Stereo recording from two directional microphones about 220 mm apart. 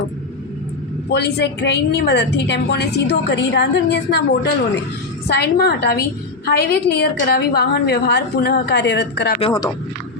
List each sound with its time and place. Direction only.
1.1 s a woman's voice: 50° left (ahead or behind)
5.3 s a woman's voice: 45° left (ahead or behind)
9.4 s speech: 15° left (ahead or behind)